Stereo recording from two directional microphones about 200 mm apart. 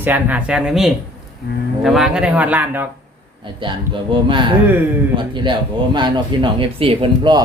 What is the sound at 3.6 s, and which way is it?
Speech, 25° right (ahead or behind).